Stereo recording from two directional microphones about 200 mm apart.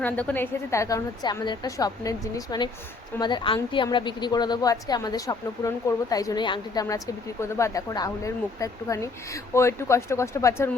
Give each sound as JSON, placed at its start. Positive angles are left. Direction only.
{"t": 0.0, "sound": "a woman's voice", "side_deg": 10}